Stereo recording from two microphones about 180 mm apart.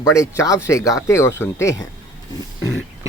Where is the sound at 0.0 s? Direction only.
15° left (ahead or behind).